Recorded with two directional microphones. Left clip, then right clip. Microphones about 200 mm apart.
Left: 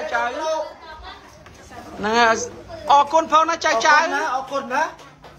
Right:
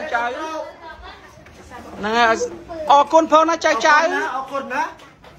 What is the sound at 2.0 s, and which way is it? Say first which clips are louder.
A woman's voice: right 1 dB; 20° left (ahead or behind).